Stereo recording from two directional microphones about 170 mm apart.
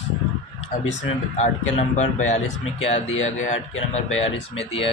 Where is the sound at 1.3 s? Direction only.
45° left (ahead or behind).